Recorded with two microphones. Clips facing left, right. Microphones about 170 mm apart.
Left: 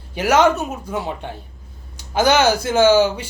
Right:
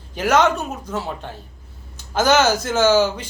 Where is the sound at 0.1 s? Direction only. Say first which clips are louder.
Left 2 dB; 10° left (ahead or behind).